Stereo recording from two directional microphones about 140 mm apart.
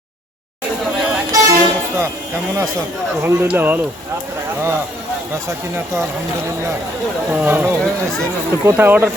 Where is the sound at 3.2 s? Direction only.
20° right (ahead or behind).